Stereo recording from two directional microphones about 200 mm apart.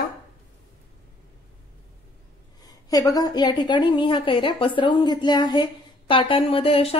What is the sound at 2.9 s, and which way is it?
A woman's voice, 20° left (ahead or behind).